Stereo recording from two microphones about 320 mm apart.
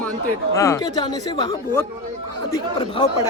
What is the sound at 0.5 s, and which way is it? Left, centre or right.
Speech, centre.